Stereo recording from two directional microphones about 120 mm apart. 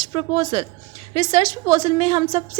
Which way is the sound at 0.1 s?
40° right (ahead or behind).